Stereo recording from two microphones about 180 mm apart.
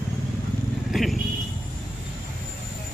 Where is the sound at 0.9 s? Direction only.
Centre (ahead or behind).